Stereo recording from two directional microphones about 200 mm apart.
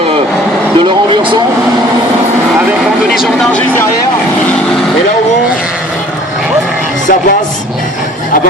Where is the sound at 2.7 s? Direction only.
Centre (ahead or behind).